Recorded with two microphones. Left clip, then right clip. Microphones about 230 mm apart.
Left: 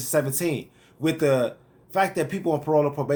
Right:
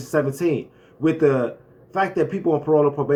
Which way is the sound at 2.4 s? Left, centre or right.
Left.